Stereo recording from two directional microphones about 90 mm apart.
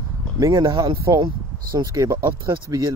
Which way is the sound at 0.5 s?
65° right (ahead or behind).